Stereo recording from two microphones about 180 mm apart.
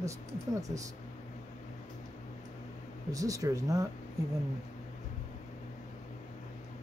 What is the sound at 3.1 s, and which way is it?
Speech, 20° right (ahead or behind).